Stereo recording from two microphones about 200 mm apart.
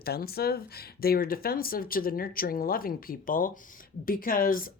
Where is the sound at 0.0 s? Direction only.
50° left (ahead or behind).